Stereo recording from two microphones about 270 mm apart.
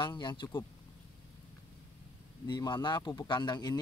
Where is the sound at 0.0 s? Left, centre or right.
Centre.